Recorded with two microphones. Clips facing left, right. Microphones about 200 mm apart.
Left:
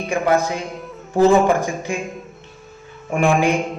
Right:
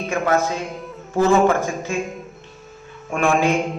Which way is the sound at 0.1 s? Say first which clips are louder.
Left 2 dB; 15° left (ahead or behind).